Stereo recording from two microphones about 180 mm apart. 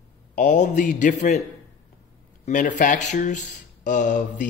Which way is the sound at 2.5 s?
45° left (ahead or behind).